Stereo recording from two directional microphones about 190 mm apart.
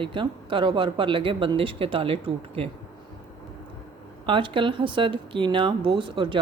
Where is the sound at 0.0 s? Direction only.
25° right (ahead or behind).